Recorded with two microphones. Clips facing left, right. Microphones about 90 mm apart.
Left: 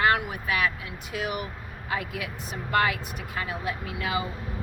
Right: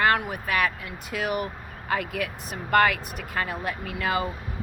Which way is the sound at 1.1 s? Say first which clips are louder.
Right 4 dB; 60° right (ahead or behind).